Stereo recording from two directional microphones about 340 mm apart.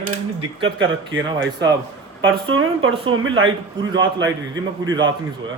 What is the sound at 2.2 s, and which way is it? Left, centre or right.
Speech, right.